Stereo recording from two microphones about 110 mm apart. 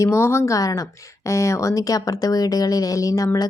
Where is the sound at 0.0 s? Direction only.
25° left (ahead or behind).